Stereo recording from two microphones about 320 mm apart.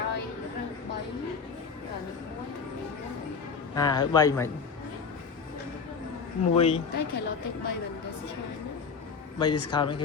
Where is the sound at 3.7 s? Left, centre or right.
Centre.